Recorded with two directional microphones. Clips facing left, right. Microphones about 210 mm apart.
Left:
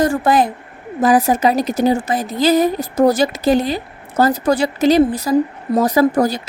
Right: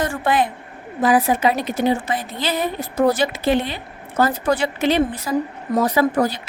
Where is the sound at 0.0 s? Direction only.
40° left (ahead or behind).